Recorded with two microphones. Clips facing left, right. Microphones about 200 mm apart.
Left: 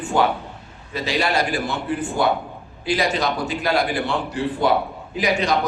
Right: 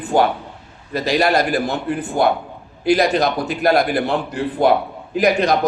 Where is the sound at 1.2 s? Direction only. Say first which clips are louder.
Right 5 dB; 60° right (ahead or behind).